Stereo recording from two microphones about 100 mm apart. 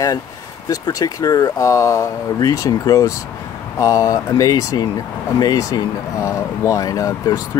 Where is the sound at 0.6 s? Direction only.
40° left (ahead or behind).